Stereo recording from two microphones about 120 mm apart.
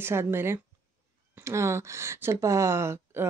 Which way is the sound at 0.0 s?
20° right (ahead or behind).